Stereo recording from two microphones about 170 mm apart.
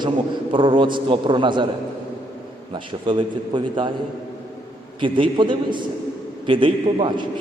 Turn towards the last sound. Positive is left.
turn(degrees=-30)  # may be behind; listen again after turning